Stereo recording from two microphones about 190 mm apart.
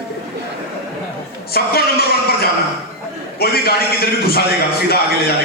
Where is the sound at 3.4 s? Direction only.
55° left (ahead or behind).